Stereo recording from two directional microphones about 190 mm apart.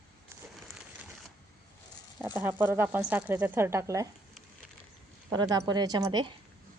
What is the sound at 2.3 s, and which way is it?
Speech, 10° right (ahead or behind).